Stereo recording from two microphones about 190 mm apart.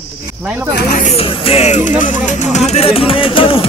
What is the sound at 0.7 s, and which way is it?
Speech, 50° left (ahead or behind).